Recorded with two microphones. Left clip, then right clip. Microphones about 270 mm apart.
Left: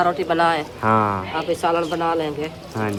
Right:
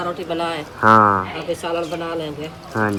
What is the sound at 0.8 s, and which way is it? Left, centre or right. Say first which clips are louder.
Speech: right 9 dB; right.